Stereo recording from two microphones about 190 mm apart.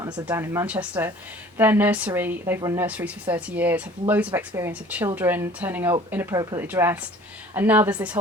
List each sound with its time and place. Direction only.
0.0 s speech: 15° right (ahead or behind)